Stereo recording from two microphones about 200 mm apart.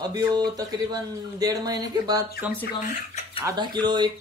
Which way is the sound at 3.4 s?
20° right (ahead or behind).